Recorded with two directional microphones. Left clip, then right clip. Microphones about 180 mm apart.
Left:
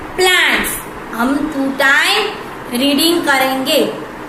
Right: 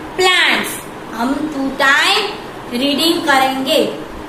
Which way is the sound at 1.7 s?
15° left (ahead or behind).